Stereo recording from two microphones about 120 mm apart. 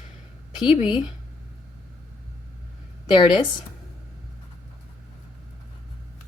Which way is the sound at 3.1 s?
35° left (ahead or behind).